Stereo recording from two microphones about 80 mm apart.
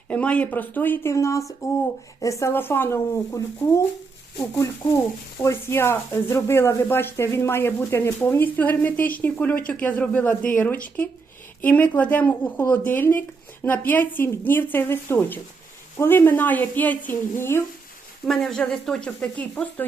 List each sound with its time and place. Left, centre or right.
0.1 s speech: centre
1.0 s a woman's voice: left
5.4 s speech: left
18.3 s speech: centre